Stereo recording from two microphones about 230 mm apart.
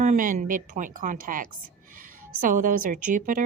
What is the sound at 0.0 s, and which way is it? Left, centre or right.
A woman's voice, right.